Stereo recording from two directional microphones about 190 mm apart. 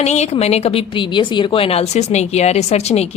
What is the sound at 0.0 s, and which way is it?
Speech, 35° left (ahead or behind).